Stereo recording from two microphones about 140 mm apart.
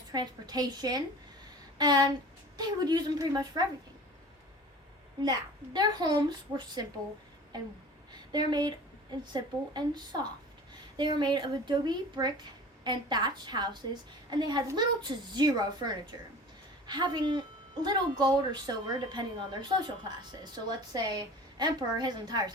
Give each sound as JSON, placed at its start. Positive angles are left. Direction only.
{"t": 0.1, "sound": "a woman's voice", "side_deg": -30}
{"t": 5.2, "sound": "a woman's voice", "side_deg": -30}
{"t": 8.1, "sound": "a woman's voice", "side_deg": -30}